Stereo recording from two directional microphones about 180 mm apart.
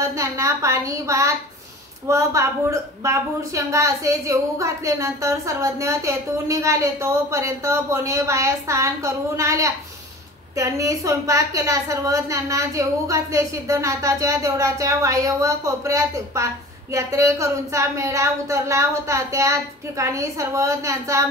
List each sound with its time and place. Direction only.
0.1 s a woman's voice: 15° right (ahead or behind)